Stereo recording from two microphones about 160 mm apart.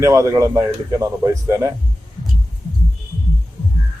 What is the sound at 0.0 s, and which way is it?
Speech, 20° right (ahead or behind).